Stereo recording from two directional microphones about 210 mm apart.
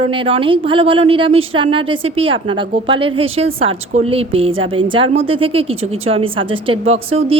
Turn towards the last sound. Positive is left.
turn(degrees=-30)  # may be behind; listen again after turning